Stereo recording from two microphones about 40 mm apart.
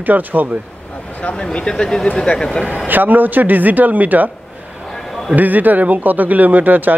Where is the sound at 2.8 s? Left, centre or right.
Right.